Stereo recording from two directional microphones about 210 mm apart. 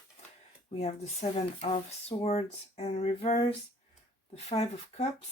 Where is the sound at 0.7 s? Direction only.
30° left (ahead or behind).